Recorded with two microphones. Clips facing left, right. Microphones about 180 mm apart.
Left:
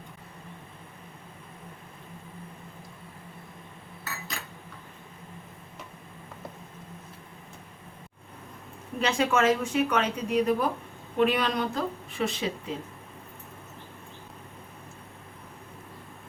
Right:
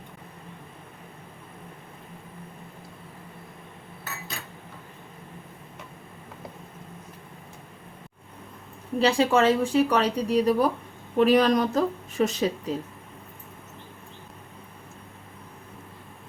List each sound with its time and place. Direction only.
9.0 s speech: 30° right (ahead or behind)